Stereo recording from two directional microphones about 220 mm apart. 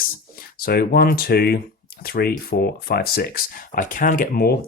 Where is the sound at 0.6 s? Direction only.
40° left (ahead or behind).